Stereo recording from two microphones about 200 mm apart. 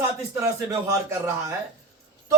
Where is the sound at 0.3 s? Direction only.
15° right (ahead or behind).